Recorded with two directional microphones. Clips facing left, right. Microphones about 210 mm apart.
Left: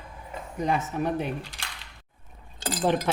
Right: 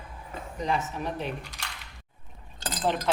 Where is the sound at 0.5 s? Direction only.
55° left (ahead or behind).